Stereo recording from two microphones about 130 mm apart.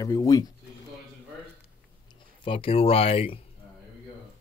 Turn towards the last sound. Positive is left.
turn(degrees=45)  # may be behind; listen again after turning